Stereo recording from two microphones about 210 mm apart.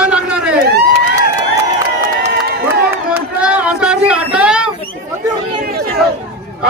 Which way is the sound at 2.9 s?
5° right (ahead or behind).